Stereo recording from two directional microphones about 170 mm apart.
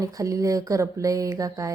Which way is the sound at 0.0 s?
20° right (ahead or behind).